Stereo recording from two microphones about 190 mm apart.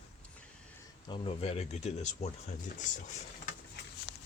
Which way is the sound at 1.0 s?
25° left (ahead or behind).